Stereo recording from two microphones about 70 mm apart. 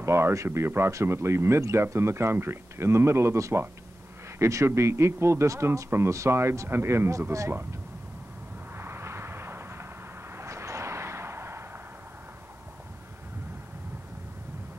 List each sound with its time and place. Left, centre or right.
0.0 s speech: right
7.1 s speech: right
8.7 s vehicle: right